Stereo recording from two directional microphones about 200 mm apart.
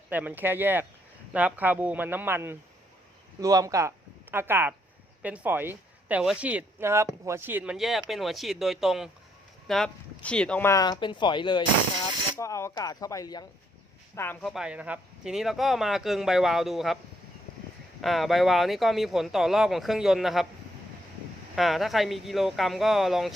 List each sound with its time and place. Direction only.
0.1 s speech: 10° right (ahead or behind); by 14.5 s 10° left (ahead or behind)
14.5 s speech: 5° right (ahead or behind)
18.0 s speech: centre (ahead or behind)
21.5 s speech: centre (ahead or behind)